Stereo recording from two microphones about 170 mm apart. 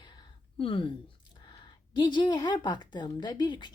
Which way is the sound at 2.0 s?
25° left (ahead or behind).